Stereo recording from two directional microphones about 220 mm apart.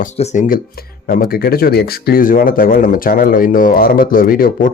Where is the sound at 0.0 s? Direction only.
30° left (ahead or behind).